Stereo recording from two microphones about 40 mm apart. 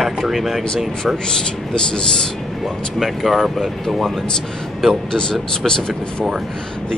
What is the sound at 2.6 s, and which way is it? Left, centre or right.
Speech, centre.